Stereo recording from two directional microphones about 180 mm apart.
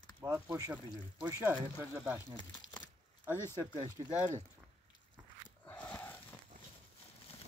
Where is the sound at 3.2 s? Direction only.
10° right (ahead or behind).